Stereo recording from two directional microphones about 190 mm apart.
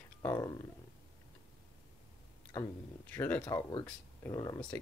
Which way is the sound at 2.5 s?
10° left (ahead or behind).